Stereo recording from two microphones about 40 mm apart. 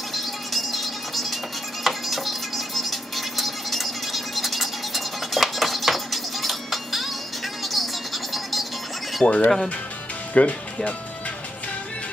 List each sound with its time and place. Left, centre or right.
0.1 s music: centre
9.2 s speech: left